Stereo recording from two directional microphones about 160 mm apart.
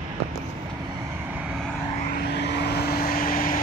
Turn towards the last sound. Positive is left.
turn(degrees=65)  # may be behind; listen again after turning